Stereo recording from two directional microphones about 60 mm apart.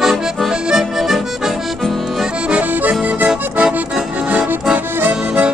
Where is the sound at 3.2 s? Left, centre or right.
Centre.